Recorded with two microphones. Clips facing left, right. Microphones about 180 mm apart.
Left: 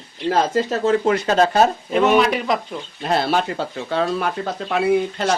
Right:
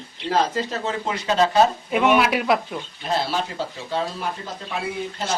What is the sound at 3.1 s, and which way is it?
Speech, 60° left (ahead or behind).